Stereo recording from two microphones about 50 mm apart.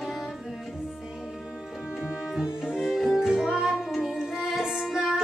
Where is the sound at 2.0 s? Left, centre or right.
Right.